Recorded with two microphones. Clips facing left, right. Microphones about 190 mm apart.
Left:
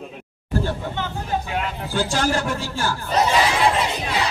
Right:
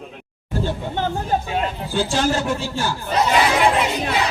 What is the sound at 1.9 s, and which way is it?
A man's voice, 20° right (ahead or behind).